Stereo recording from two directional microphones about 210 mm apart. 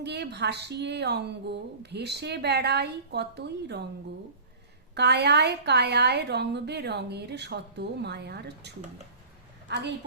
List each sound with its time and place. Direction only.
0.0 s speech: 55° right (ahead or behind)
4.9 s a woman's voice: 50° right (ahead or behind)